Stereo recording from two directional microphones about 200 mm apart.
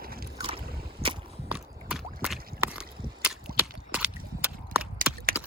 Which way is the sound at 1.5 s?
5° right (ahead or behind).